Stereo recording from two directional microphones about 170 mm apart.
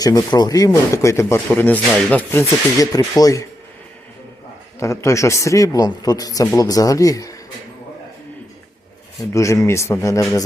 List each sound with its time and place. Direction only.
0.0 s speech: 25° left (ahead or behind)
4.8 s speech: 15° left (ahead or behind)
9.3 s a man's voice: 20° left (ahead or behind)